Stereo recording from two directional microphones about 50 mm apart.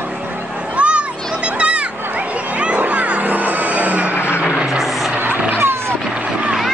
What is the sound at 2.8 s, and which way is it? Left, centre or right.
Music, right.